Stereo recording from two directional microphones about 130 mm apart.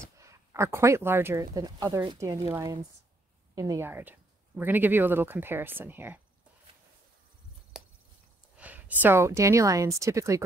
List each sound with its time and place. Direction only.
0.2 s speech: 20° right (ahead or behind)
1.4 s speech: 30° right (ahead or behind)
7.7 s a sound: 5° right (ahead or behind)
8.5 s speech: 10° right (ahead or behind)